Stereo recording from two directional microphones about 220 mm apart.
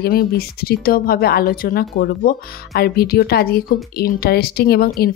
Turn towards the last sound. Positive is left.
turn(degrees=45)  # may be behind; listen again after turning